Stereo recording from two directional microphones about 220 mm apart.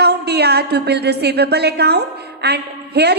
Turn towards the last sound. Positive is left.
turn(degrees=-50)  # may be behind; listen again after turning